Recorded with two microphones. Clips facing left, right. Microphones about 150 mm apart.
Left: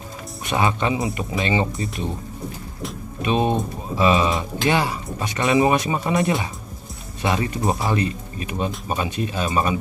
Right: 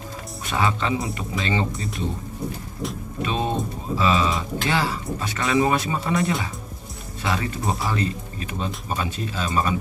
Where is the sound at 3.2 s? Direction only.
15° left (ahead or behind).